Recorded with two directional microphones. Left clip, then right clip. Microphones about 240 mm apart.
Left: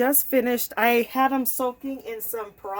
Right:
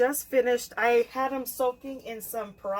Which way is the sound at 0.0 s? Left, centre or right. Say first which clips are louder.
Left 2 dB; left.